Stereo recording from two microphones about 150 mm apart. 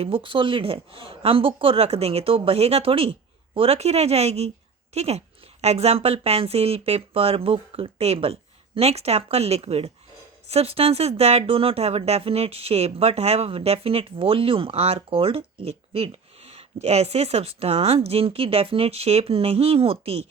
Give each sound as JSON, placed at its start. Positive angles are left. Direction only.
{"t": 0.0, "sound": "speech", "side_deg": -35}